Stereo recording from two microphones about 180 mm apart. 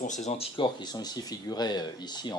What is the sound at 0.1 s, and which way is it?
Speech, 40° left (ahead or behind).